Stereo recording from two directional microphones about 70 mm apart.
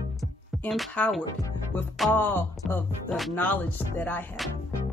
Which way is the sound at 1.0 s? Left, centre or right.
Centre.